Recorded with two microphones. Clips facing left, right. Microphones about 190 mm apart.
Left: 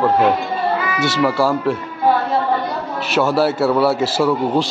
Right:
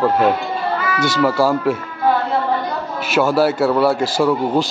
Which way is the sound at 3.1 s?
Centre (ahead or behind).